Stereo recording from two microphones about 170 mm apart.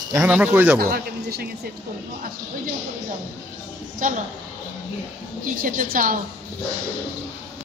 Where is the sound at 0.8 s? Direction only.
65° right (ahead or behind).